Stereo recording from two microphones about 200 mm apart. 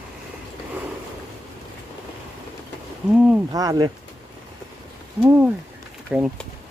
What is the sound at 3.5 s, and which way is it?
Speech, 20° right (ahead or behind).